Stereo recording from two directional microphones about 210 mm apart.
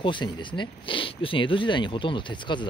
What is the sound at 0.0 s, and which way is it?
Speech, 25° left (ahead or behind).